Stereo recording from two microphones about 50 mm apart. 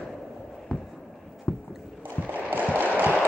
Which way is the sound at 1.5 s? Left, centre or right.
Left.